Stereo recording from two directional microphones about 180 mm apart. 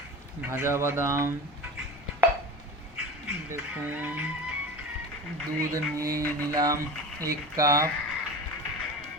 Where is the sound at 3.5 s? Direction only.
10° right (ahead or behind).